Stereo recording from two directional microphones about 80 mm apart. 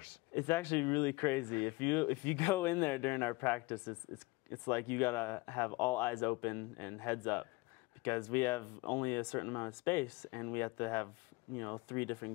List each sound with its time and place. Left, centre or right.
0.0 s speech: left